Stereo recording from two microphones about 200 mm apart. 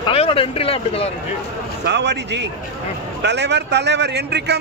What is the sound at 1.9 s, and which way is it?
A man's voice, 60° right (ahead or behind).